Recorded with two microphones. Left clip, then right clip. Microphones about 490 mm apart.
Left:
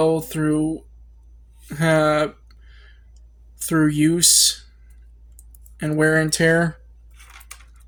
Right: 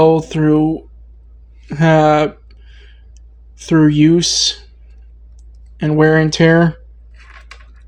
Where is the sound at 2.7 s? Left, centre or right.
Left.